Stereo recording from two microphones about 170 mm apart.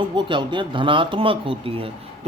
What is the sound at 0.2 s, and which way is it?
A man's voice, 30° right (ahead or behind).